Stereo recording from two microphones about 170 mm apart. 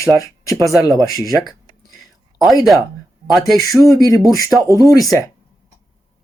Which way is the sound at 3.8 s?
20° left (ahead or behind).